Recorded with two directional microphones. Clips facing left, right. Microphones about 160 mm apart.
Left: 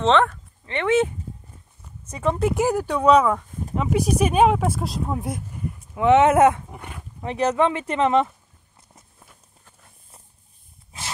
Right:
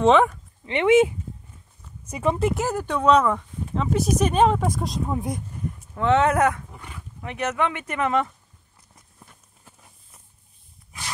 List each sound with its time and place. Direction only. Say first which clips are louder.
0.0 s speech: right 2 dB; 10° right (ahead or behind)
2.5 s speech: left 4 dB; 10° left (ahead or behind)
5.9 s speech: left 4 dB; 15° left (ahead or behind)